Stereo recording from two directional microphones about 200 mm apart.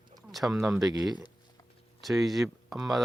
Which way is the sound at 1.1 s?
20° left (ahead or behind).